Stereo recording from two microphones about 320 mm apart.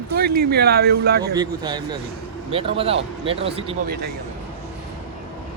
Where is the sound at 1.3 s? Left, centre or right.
Centre.